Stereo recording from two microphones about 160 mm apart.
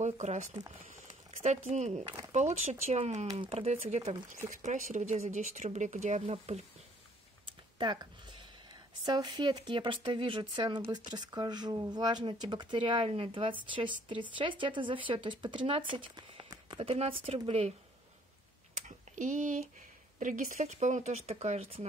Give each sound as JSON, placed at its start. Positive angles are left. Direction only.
{"t": 0.0, "sound": "speech", "side_deg": -45}
{"t": 3.3, "sound": "speech", "side_deg": -35}
{"t": 4.5, "sound": "speech", "side_deg": -50}
{"t": 7.4, "sound": "a sound", "side_deg": -30}
{"t": 9.0, "sound": "speech", "side_deg": -25}
{"t": 15.9, "sound": "a sound", "side_deg": -30}
{"t": 16.9, "sound": "speech", "side_deg": -40}
{"t": 18.8, "sound": "a sound", "side_deg": -50}
{"t": 20.2, "sound": "speech", "side_deg": -55}